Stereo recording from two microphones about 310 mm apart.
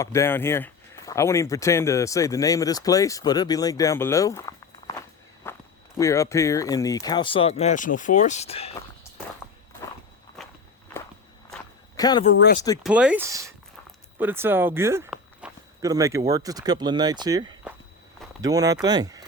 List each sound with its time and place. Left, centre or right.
0.0 s speech: centre
10.3 s walk: centre
11.5 s a sound: centre
12.3 s speech: left
12.5 s speech: centre
12.8 s speech: centre